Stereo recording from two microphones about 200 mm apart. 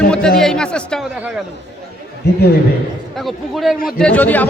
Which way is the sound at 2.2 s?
55° left (ahead or behind).